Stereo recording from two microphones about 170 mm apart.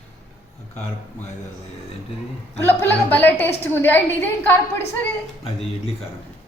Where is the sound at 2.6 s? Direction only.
10° left (ahead or behind).